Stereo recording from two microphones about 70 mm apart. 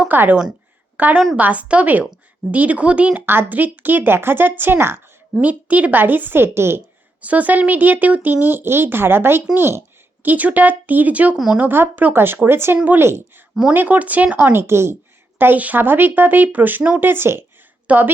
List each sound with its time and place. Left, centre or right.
0.1 s a woman's voice: right
7.2 s a woman's voice: right
10.2 s a woman's voice: right
13.1 s a woman's voice: right
13.7 s speech: right
14.7 s a woman's voice: right
15.4 s a woman's voice: right
17.8 s speech: right